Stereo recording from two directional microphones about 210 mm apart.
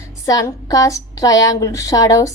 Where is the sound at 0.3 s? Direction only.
15° left (ahead or behind).